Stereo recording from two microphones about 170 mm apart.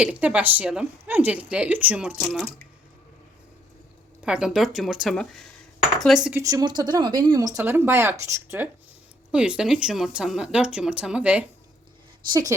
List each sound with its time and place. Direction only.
0.0 s a woman's voice: 5° right (ahead or behind)
4.2 s speech: 5° right (ahead or behind)
6.3 s a woman's voice: 20° right (ahead or behind)
12.3 s speech: 20° right (ahead or behind)